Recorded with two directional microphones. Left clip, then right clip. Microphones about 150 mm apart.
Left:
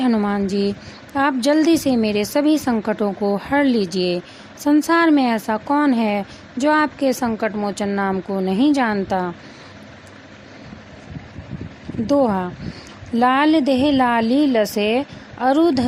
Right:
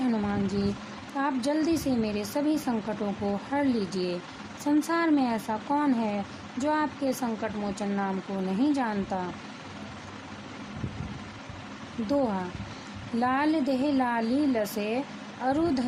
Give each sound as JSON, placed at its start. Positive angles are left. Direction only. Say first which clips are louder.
{"t": 0.0, "sound": "a woman's voice", "louder": "left 9 dB", "side_deg": 50}
{"t": 12.0, "sound": "a woman's voice", "louder": "left 10 dB", "side_deg": 45}